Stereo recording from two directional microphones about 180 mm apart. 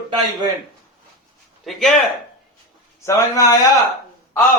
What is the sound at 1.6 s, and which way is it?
Speech, centre (ahead or behind).